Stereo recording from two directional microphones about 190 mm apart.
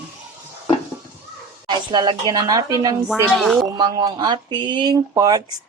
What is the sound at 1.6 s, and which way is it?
Speech, 25° right (ahead or behind).